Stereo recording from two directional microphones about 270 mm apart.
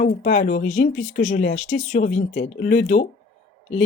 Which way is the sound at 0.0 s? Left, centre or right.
Left.